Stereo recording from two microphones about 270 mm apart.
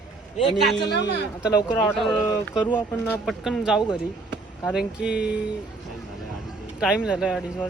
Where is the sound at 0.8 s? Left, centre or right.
Left.